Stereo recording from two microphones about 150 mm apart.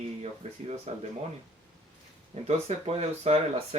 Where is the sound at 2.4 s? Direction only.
45° right (ahead or behind).